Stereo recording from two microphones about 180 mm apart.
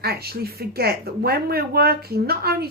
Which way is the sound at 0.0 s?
60° right (ahead or behind).